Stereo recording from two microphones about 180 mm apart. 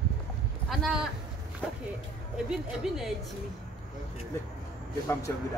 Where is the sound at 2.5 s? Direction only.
Centre (ahead or behind).